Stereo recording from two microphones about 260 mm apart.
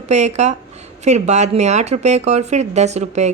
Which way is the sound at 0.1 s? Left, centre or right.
Right.